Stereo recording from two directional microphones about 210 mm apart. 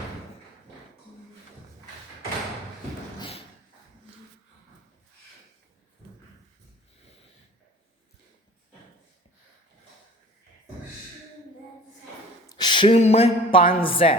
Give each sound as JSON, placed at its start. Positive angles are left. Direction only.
{"t": 3.2, "sound": "a sound", "side_deg": 25}
{"t": 12.5, "sound": "speech", "side_deg": 20}
{"t": 13.6, "sound": "speech", "side_deg": 40}
{"t": 13.8, "sound": "a woman's voice", "side_deg": 25}